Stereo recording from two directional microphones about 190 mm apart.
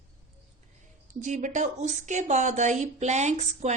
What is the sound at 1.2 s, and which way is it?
Speech, 40° right (ahead or behind).